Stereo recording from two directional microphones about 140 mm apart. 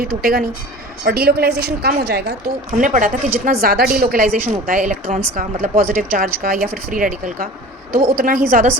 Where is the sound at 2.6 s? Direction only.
70° right (ahead or behind); by 4.4 s 90° right.